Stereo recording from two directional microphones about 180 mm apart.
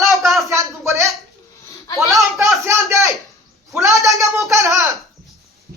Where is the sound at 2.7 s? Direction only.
15° right (ahead or behind).